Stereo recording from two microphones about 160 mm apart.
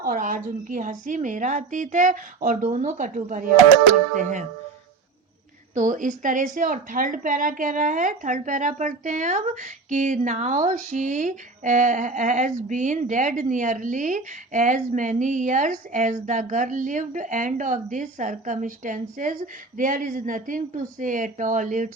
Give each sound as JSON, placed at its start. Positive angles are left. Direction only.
{"t": 0.0, "sound": "a woman's voice", "side_deg": -60}
{"t": 5.7, "sound": "a woman's voice", "side_deg": -55}